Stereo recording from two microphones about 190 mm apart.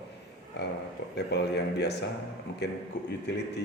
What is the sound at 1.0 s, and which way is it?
Speech, 65° left (ahead or behind).